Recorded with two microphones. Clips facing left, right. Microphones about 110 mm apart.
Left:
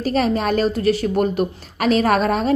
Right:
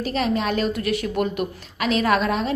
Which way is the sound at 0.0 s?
40° left (ahead or behind).